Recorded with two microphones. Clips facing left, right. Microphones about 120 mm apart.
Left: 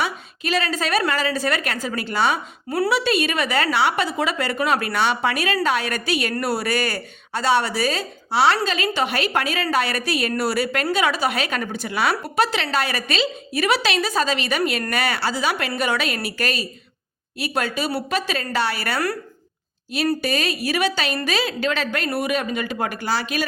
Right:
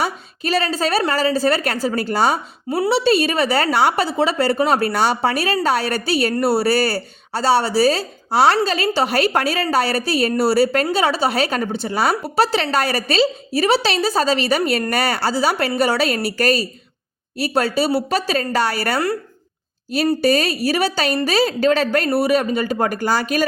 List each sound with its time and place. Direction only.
0.0 s a woman's voice: 35° right (ahead or behind)
2.6 s a woman's voice: 25° right (ahead or behind); by 23.5 s 45° right (ahead or behind)